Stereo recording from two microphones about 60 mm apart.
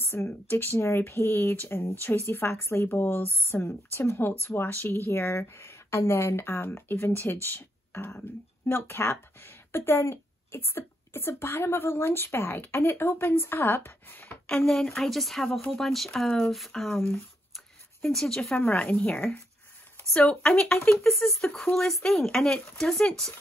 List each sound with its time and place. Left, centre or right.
0.0 s speech: left
2.9 s speech: left
14.7 s speech: centre
18.7 s speech: left
21.1 s speech: centre